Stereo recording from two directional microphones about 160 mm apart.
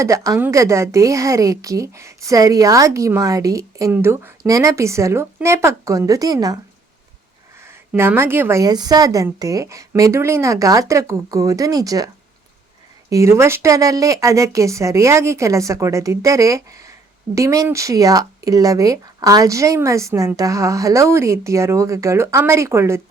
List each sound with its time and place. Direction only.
0.0 s a woman's voice: 20° right (ahead or behind)
7.6 s a woman's voice: 15° right (ahead or behind)